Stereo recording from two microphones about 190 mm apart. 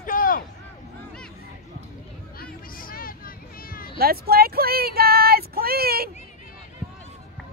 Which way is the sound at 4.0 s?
55° right (ahead or behind).